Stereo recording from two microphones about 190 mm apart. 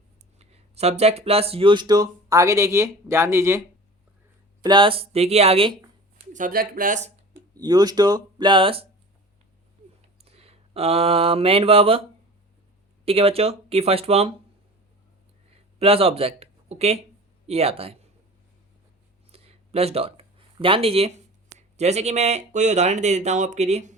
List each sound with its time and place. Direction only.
0.3 s speech: 35° right (ahead or behind); by 3.6 s 15° right (ahead or behind)
4.6 s speech: 25° right (ahead or behind)
6.3 s speech: 45° right (ahead or behind)
7.5 s speech: 20° right (ahead or behind)
10.2 s speech: 30° right (ahead or behind)
13.1 s speech: 30° right (ahead or behind)
15.8 s speech: 30° right (ahead or behind)
19.3 s a sound: 30° right (ahead or behind)
21.8 s speech: 35° right (ahead or behind)